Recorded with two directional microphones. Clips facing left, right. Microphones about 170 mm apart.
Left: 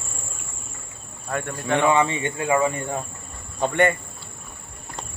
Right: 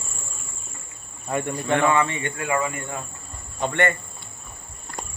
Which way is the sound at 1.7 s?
15° left (ahead or behind).